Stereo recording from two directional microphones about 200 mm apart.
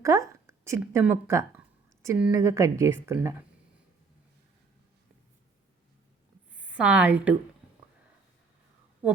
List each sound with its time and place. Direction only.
0.0 s speech: 15° right (ahead or behind)
6.6 s a woman's voice: 5° right (ahead or behind)